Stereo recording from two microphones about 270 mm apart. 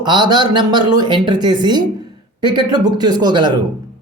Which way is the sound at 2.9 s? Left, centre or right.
Centre.